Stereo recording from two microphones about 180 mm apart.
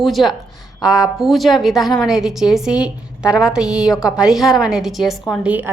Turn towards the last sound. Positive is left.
turn(degrees=-10)  # may be behind; listen again after turning